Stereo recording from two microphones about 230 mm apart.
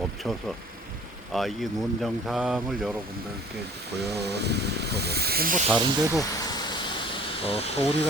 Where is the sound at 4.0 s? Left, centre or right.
Right.